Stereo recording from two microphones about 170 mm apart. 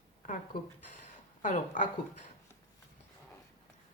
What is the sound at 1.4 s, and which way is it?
Speech, 50° left (ahead or behind).